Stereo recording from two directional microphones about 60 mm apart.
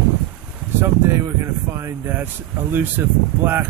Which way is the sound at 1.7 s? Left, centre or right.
Right.